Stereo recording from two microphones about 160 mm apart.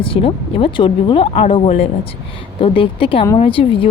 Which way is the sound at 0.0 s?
35° left (ahead or behind).